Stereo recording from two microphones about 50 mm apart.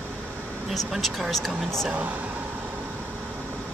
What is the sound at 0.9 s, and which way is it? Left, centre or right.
Speech, centre.